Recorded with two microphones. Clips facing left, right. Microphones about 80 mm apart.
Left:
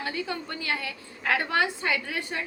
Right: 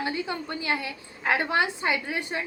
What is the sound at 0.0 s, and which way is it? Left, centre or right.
A woman's voice, right.